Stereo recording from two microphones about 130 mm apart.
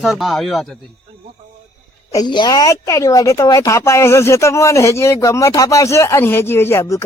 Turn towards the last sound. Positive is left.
turn(degrees=20)  # may be behind; listen again after turning